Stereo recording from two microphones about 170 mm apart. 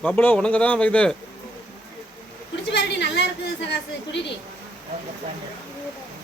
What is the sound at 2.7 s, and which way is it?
Chatter, 90° left.